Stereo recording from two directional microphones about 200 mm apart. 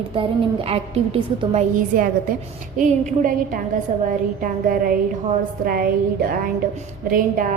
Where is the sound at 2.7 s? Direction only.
40° right (ahead or behind).